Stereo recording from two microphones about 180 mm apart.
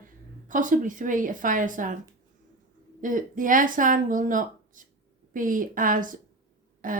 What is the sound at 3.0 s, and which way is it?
Speech, 45° right (ahead or behind).